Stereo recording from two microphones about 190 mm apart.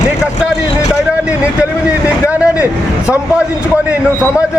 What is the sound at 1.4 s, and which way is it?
Speech, 5° right (ahead or behind).